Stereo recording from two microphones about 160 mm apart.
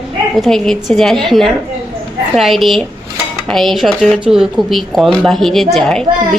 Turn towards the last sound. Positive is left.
turn(degrees=5)  # may be behind; listen again after turning